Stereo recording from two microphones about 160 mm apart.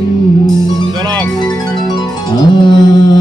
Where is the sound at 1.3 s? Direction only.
25° left (ahead or behind).